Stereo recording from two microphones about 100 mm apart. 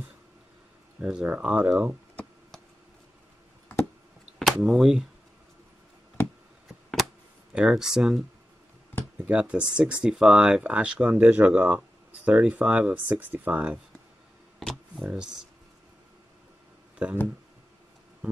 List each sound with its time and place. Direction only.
1.0 s speech: 10° right (ahead or behind)
2.2 s knock: 15° left (ahead or behind)
4.5 s speech: centre (ahead or behind)
6.2 s a sound: 25° left (ahead or behind)
7.5 s speech: 5° right (ahead or behind)
9.3 s speech: 10° right (ahead or behind)
14.6 s a sound: centre (ahead or behind)
15.0 s speech: 10° right (ahead or behind)
17.0 s speech: 15° right (ahead or behind)